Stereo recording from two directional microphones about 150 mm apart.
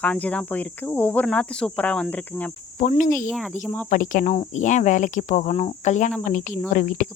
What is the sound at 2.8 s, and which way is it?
Speech, 55° left (ahead or behind).